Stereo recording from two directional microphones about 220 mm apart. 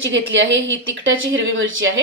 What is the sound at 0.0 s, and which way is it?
Speech, 55° right (ahead or behind).